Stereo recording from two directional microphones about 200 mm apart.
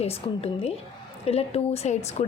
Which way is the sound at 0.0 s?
30° left (ahead or behind).